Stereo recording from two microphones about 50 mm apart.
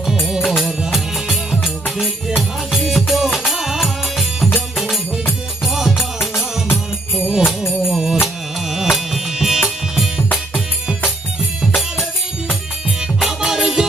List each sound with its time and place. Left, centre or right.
0.1 s music: centre
7.4 s music: left
7.9 s music: centre
13.1 s music: centre